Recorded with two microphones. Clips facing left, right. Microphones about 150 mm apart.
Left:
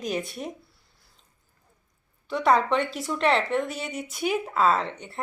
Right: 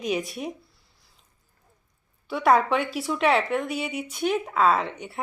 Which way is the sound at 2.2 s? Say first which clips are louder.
Right 1 dB; 5° right (ahead or behind).